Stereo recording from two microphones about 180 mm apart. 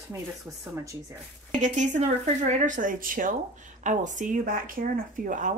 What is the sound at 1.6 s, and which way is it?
Speech, 40° right (ahead or behind).